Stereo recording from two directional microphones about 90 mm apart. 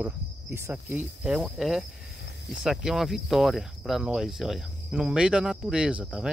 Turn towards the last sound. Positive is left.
turn(degrees=-10)  # may be behind; listen again after turning